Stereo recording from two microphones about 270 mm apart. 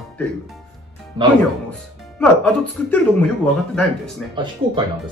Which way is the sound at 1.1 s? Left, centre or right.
Centre.